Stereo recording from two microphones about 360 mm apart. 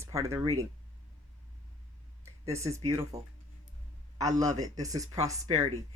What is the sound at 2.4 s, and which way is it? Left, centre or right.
Speech, centre.